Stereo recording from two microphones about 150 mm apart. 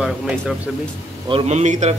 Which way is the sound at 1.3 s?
45° right (ahead or behind).